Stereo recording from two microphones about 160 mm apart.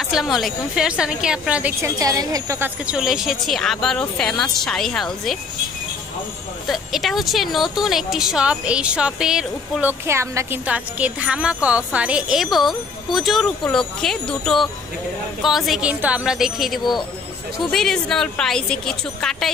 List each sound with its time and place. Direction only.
0.0 s a woman's voice: centre (ahead or behind)
1.8 s a woman's voice: 20° right (ahead or behind)
2.8 s a woman's voice: 5° right (ahead or behind)
6.7 s a woman's voice: centre (ahead or behind)